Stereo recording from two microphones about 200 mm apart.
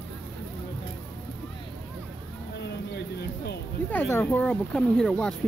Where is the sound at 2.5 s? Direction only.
55° left (ahead or behind).